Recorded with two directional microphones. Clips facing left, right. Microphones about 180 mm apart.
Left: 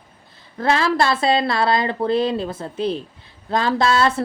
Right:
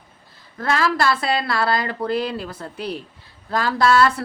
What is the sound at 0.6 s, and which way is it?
Speech, 25° left (ahead or behind).